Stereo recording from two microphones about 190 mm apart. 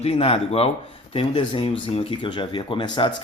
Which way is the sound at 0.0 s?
30° left (ahead or behind).